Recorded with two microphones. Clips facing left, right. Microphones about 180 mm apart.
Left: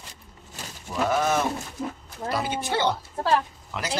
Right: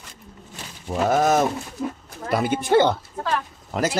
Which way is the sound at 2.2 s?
55° right (ahead or behind).